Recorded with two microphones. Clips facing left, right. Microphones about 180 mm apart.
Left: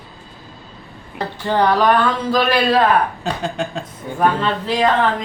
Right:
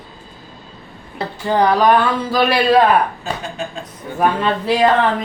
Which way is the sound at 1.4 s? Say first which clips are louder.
Right 1 dB; 10° right (ahead or behind).